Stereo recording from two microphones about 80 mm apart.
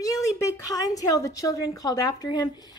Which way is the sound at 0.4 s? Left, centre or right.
Left.